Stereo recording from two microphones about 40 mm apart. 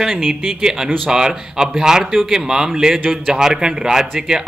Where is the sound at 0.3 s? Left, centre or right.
Centre.